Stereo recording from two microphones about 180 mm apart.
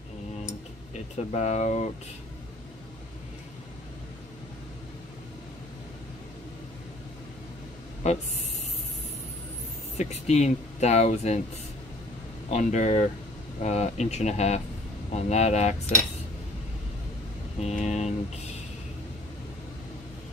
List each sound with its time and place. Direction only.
1.1 s speech: 40° left (ahead or behind)
8.0 s speech: 40° left (ahead or behind)
9.9 s speech: 40° left (ahead or behind)
12.4 s speech: 40° left (ahead or behind)
17.6 s speech: 40° left (ahead or behind)